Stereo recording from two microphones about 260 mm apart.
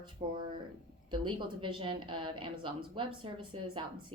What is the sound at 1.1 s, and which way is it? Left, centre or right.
A woman's voice, centre.